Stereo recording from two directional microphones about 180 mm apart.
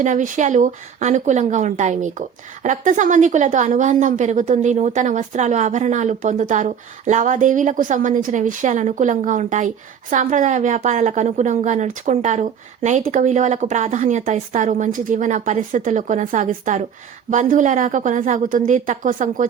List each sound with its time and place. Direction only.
0.0 s a woman's voice: 45° right (ahead or behind)